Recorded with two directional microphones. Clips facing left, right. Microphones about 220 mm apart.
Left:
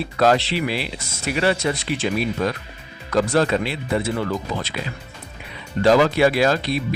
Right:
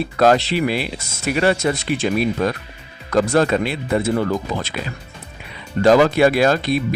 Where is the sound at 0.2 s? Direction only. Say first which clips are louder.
Right 3 dB; 45° right (ahead or behind).